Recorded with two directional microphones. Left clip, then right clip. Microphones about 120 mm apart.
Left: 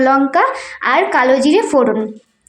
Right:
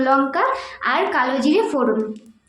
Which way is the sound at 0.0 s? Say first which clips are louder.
Left 5 dB; 40° left (ahead or behind).